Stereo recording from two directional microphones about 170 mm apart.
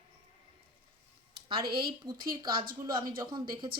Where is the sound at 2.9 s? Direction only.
25° right (ahead or behind).